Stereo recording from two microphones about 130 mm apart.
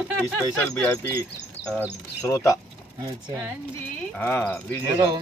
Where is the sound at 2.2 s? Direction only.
25° left (ahead or behind).